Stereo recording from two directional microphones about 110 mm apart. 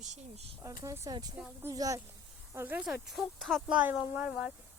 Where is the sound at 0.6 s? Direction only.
30° right (ahead or behind).